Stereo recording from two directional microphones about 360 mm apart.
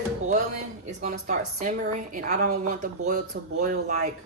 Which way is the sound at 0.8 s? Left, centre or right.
Centre.